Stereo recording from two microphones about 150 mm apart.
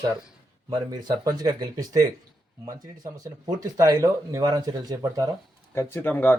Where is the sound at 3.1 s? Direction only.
25° right (ahead or behind).